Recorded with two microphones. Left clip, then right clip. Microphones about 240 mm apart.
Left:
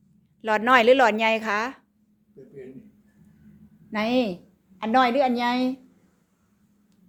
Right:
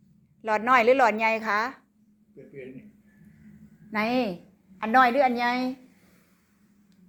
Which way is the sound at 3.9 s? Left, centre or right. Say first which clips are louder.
Left 2 dB; left.